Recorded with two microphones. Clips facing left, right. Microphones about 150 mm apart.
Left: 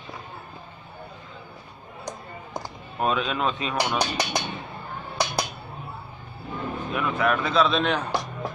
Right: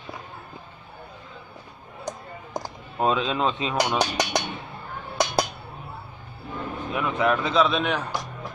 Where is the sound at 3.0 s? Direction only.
25° right (ahead or behind).